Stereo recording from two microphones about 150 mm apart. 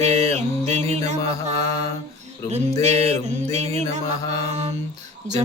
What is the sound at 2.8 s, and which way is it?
Mantra, 50° right (ahead or behind).